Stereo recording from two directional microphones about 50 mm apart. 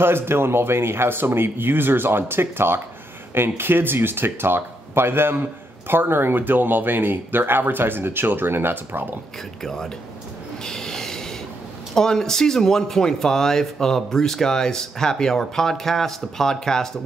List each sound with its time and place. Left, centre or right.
0.0 s speech: right
9.6 s speech: centre
10.6 s train: centre
11.9 s speech: centre